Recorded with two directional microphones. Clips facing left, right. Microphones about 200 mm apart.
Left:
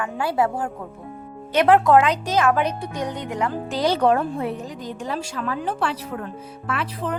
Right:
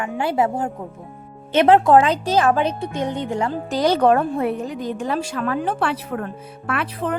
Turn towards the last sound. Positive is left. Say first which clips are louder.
# right 3 dB
turn(degrees=-60)  # may be behind; listen again after turning